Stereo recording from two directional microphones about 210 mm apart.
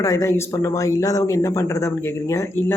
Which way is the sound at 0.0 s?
15° left (ahead or behind).